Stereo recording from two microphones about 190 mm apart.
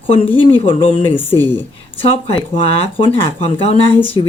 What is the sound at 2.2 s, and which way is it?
Speech, 30° left (ahead or behind).